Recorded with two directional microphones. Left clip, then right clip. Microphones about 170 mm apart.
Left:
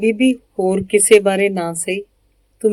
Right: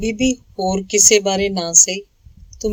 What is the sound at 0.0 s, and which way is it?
Speech, 45° right (ahead or behind).